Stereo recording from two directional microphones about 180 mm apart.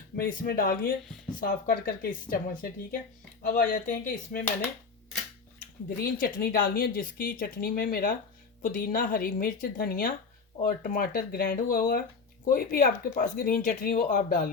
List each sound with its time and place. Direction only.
0.2 s speech: 55° left (ahead or behind)
6.0 s speech: 55° left (ahead or behind)